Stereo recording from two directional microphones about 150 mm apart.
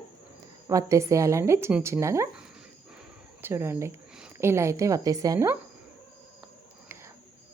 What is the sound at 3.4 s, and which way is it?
A woman's voice, 15° right (ahead or behind).